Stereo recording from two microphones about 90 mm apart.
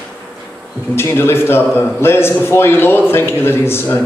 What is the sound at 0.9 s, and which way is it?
A man's voice, 25° left (ahead or behind).